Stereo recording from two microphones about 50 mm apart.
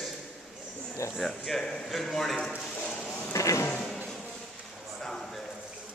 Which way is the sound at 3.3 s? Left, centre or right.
Left.